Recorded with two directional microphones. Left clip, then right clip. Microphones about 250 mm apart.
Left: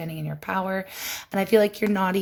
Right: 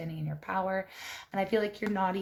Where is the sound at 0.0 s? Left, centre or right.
Left.